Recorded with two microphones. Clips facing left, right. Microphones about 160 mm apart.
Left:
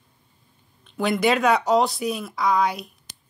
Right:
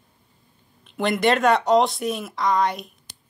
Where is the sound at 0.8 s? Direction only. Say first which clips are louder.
Right 1 dB; centre (ahead or behind).